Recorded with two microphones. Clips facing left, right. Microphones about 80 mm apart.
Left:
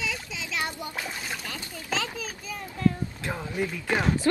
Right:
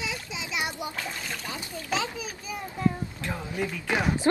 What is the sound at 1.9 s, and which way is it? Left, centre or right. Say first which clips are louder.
A child's voice: right 1 dB; centre.